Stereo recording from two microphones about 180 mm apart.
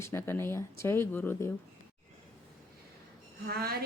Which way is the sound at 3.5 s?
60° right (ahead or behind).